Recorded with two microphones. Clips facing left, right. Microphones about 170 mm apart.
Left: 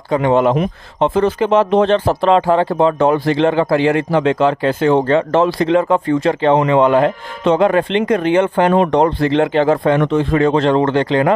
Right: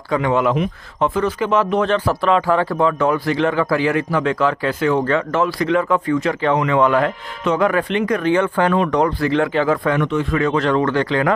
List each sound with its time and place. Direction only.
0.1 s speech: 25° left (ahead or behind)